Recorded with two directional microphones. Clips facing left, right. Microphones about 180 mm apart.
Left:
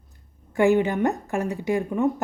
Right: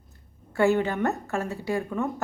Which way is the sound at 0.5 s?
15° left (ahead or behind).